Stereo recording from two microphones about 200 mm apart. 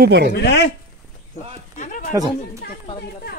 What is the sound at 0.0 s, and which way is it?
Speech, 50° right (ahead or behind).